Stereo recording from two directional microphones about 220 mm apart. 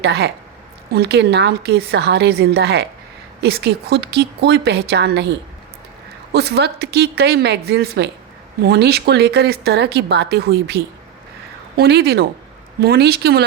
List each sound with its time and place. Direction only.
0.0 s speech: 50° right (ahead or behind)